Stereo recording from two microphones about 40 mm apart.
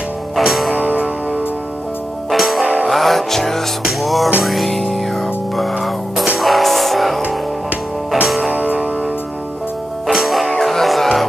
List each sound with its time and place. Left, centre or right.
0.4 s music: centre
2.3 s music: centre
8.5 s music: right
10.0 s music: centre